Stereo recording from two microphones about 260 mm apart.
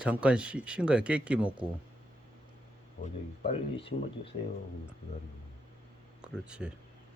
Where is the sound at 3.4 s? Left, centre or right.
Left.